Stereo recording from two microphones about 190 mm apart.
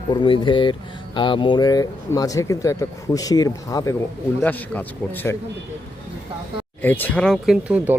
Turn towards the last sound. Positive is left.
turn(degrees=-10)  # may be behind; listen again after turning